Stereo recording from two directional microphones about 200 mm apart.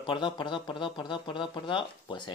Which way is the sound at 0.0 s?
25° left (ahead or behind).